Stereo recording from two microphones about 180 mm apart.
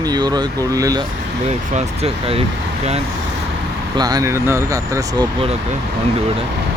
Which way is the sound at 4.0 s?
20° right (ahead or behind).